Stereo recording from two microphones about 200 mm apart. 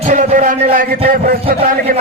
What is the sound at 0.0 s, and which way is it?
A man's voice, 40° right (ahead or behind).